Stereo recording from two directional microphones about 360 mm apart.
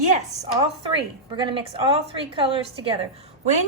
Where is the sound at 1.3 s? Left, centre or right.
Centre.